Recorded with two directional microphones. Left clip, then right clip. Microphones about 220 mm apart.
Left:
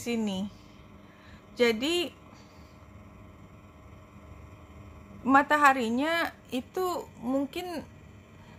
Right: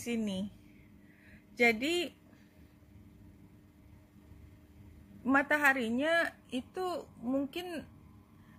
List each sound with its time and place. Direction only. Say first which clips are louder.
0.0 s a woman's voice: left 5 dB; 5° right (ahead or behind)
1.6 s a woman's voice: left 3 dB; 5° right (ahead or behind)
5.2 s a woman's voice: left 7 dB; centre (ahead or behind)